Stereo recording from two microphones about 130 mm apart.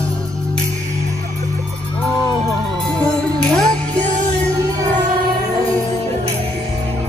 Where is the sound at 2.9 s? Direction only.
5° left (ahead or behind).